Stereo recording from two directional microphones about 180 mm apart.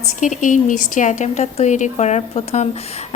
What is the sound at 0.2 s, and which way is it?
A woman's voice, 45° left (ahead or behind).